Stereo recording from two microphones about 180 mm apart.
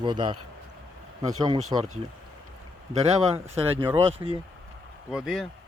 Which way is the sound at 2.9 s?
35° right (ahead or behind).